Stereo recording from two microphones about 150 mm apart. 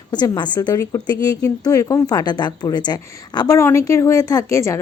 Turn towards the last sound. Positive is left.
turn(degrees=20)  # may be behind; listen again after turning